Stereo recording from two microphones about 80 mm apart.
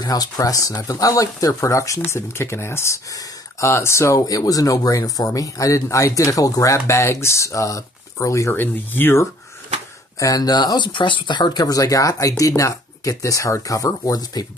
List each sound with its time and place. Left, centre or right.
0.0 s speech: left
8.5 s speech: left
10.1 s speech: left